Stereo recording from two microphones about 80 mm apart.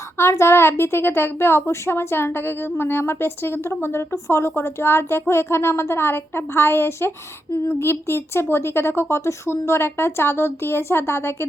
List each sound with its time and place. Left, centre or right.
0.2 s a woman's voice: left